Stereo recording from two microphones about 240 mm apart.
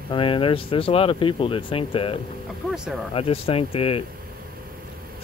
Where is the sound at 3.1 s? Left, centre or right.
Left.